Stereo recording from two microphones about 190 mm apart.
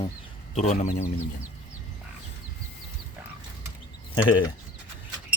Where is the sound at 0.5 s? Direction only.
35° left (ahead or behind).